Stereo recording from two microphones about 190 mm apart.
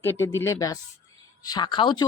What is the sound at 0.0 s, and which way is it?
A woman's voice, 10° left (ahead or behind).